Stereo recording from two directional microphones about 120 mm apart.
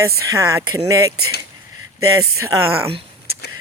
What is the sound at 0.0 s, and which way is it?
Speech, 25° right (ahead or behind).